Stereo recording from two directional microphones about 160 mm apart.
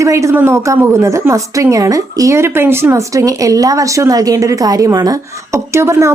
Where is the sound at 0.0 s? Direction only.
20° right (ahead or behind).